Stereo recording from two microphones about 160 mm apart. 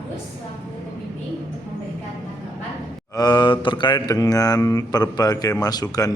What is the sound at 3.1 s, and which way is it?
Mantra, 25° left (ahead or behind).